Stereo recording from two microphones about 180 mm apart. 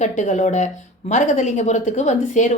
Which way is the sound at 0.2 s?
45° left (ahead or behind).